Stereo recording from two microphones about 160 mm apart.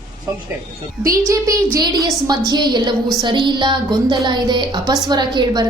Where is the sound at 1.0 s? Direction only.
20° right (ahead or behind).